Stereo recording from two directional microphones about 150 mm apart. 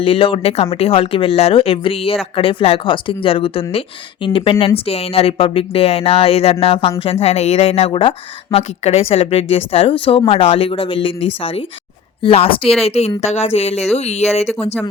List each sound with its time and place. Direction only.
0.0 s speech: 40° left (ahead or behind)